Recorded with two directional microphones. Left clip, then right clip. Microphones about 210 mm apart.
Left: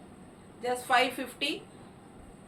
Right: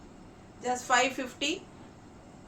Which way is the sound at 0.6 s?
15° right (ahead or behind).